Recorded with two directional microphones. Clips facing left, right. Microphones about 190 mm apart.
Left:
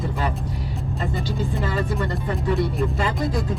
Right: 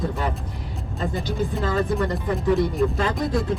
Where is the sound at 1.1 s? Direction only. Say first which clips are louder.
Right 2 dB; centre (ahead or behind).